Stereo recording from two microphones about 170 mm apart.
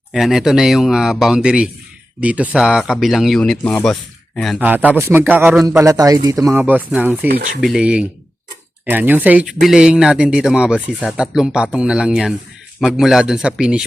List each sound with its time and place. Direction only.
0.1 s speech: centre (ahead or behind)
4.6 s a man's voice: 10° right (ahead or behind)
6.6 s a man's voice: 10° right (ahead or behind)
7.3 s speech: 60° right (ahead or behind)
7.6 s speech: 5° right (ahead or behind)